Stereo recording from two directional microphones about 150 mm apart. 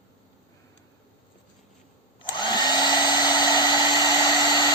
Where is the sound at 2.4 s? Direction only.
30° left (ahead or behind).